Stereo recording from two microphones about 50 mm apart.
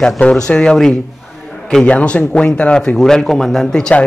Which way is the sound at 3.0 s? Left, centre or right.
Centre.